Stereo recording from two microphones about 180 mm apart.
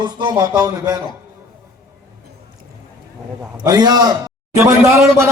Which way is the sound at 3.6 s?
20° right (ahead or behind).